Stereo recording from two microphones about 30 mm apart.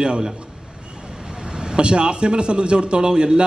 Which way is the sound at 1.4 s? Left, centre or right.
Right.